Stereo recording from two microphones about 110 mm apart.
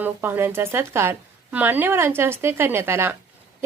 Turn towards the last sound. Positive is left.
turn(degrees=-25)  # may be behind; listen again after turning